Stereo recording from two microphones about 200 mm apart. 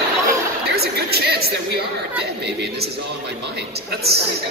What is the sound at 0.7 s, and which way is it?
Chatter, 55° right (ahead or behind).